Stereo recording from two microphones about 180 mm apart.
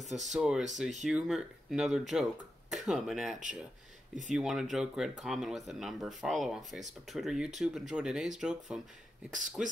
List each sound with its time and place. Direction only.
0.0 s speech: centre (ahead or behind)
9.3 s speech: 45° right (ahead or behind)